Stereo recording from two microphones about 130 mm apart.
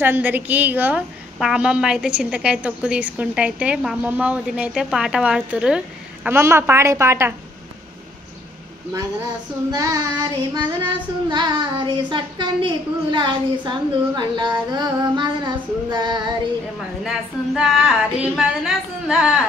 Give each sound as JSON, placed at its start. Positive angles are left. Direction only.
{"t": 0.0, "sound": "a woman's voice", "side_deg": -15}
{"t": 9.7, "sound": "child singing", "side_deg": -30}
{"t": 17.6, "sound": "a sound", "side_deg": 0}